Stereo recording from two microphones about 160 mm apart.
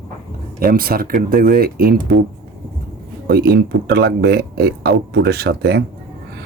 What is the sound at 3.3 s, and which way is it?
Speech, 85° right.